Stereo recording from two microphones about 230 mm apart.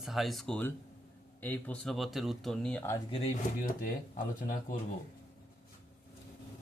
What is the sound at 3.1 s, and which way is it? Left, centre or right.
Speech, left.